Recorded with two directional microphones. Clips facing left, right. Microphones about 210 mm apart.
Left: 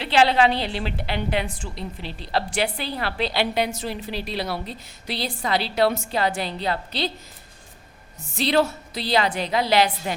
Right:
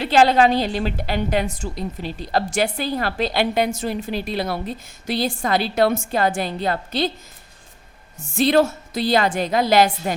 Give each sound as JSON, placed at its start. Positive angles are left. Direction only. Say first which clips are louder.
{"t": 0.0, "sound": "a woman's voice", "louder": "right 3 dB", "side_deg": -45}
{"t": 8.2, "sound": "a woman's voice", "louder": "right 4 dB", "side_deg": -50}